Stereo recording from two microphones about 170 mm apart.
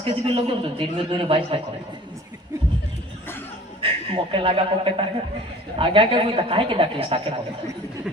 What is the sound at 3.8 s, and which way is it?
Speech, 30° right (ahead or behind).